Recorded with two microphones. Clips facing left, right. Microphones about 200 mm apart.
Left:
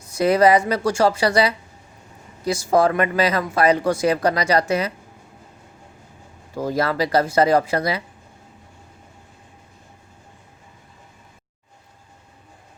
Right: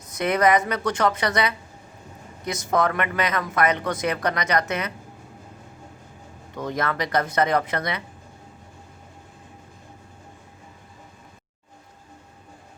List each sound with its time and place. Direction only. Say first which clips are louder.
0.1 s a woman's voice: left 5 dB; 30° left (ahead or behind)
6.5 s speech: left 5 dB; 30° left (ahead or behind)